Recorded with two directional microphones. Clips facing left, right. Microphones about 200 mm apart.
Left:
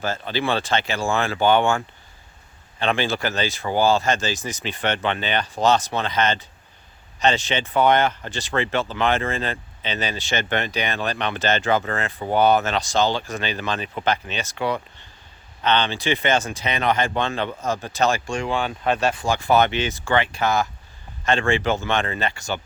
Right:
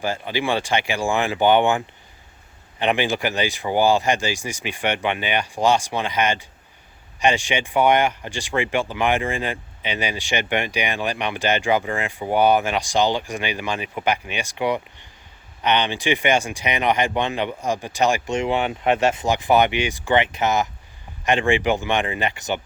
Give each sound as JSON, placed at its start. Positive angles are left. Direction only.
{"t": 0.0, "sound": "speech", "side_deg": -15}